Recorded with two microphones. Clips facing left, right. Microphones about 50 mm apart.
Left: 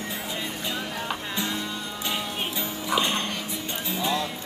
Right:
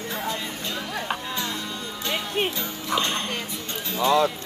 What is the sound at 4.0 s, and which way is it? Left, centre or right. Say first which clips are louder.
Music: right 8 dB; right.